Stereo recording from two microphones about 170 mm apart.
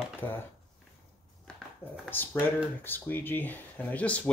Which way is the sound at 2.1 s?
10° left (ahead or behind).